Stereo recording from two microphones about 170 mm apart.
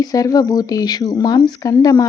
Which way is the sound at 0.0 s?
20° left (ahead or behind).